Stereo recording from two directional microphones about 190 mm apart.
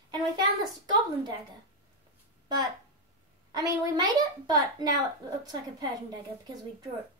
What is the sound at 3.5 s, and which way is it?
A woman's voice, 20° right (ahead or behind).